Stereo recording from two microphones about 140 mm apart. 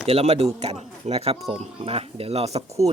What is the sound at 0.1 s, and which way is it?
Speech, 45° right (ahead or behind).